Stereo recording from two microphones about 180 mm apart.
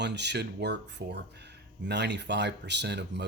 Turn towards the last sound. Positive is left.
turn(degrees=-70)  # may be behind; listen again after turning